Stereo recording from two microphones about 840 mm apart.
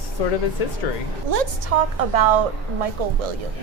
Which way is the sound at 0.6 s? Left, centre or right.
Left.